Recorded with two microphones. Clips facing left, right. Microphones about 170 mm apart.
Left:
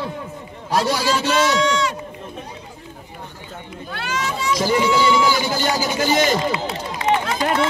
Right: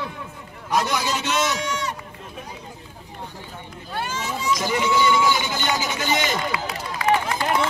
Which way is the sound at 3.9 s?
85° left.